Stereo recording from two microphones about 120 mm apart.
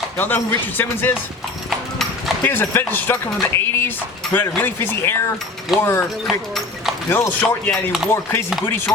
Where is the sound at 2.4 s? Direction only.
15° left (ahead or behind).